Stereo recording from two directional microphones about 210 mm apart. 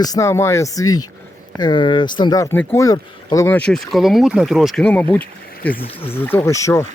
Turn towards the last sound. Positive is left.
turn(degrees=15)  # may be behind; listen again after turning